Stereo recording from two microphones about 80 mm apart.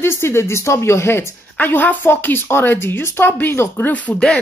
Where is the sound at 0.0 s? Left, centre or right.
Left.